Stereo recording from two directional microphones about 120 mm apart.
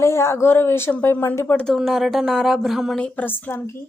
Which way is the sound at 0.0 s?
20° left (ahead or behind).